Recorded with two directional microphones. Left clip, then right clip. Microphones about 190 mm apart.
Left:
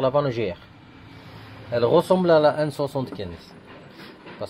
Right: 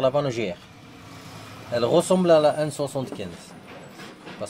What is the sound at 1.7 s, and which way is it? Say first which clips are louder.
Speech: left 2 dB; 25° left (ahead or behind).